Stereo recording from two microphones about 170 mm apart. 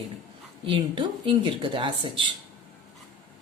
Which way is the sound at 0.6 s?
30° right (ahead or behind).